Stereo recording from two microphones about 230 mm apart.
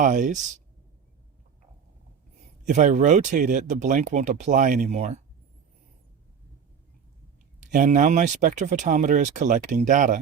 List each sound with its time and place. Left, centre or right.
0.0 s speech: right
2.6 s speech: right
7.6 s speech: right